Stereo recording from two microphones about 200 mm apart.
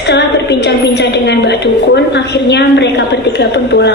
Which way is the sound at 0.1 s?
60° left (ahead or behind).